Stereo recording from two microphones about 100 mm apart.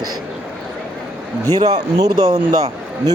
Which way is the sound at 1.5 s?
45° right (ahead or behind).